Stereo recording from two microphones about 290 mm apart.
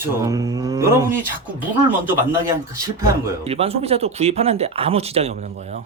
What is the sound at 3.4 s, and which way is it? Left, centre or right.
Speech, right.